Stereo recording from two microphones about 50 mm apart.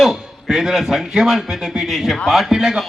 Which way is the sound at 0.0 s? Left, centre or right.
Centre.